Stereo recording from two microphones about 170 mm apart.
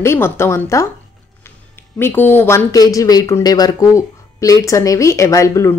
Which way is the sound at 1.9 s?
10° left (ahead or behind).